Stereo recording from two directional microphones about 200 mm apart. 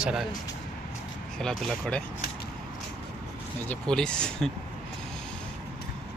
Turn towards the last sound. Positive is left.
turn(degrees=5)  # may be behind; listen again after turning